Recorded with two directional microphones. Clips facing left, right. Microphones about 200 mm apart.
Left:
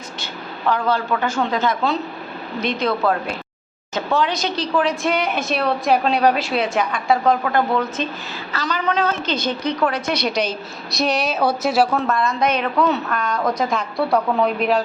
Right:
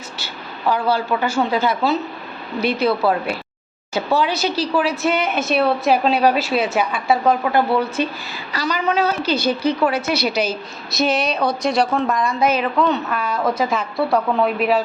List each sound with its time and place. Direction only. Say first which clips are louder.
0.2 s a woman's voice: left 1 dB; 10° right (ahead or behind)
12.0 s a woman's voice: right 1 dB; 15° right (ahead or behind)